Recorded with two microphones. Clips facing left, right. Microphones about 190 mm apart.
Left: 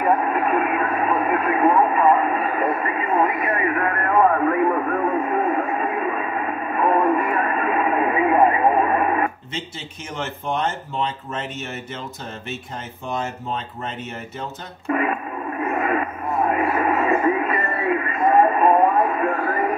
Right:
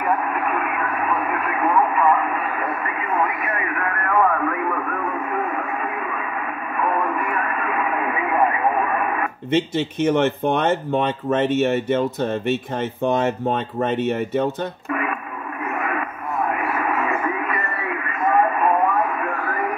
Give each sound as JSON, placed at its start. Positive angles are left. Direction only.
{"t": 0.0, "sound": "radio", "side_deg": 25}
{"t": 9.5, "sound": "speech", "side_deg": -65}
{"t": 14.9, "sound": "radio", "side_deg": 30}